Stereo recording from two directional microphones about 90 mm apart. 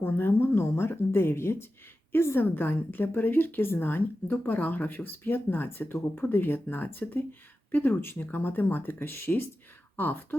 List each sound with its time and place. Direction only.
0.0 s speech: 25° left (ahead or behind)